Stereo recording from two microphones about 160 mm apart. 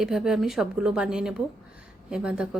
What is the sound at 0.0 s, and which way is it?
A woman's voice, centre (ahead or behind).